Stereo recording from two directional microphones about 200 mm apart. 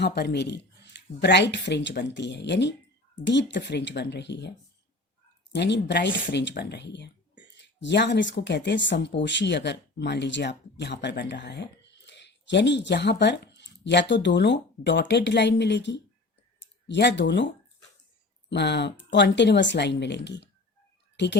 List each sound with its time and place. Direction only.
0.0 s speech: 55° left (ahead or behind)
5.5 s speech: 60° left (ahead or behind)